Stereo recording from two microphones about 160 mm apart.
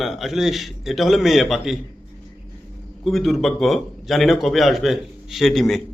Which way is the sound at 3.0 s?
Centre (ahead or behind).